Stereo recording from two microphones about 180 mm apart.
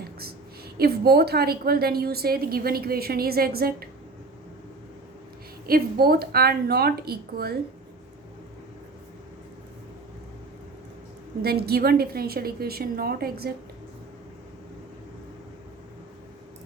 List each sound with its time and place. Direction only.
0.8 s a woman's voice: 60° right (ahead or behind)
5.6 s a woman's voice: 55° right (ahead or behind)
11.4 s a woman's voice: 60° right (ahead or behind)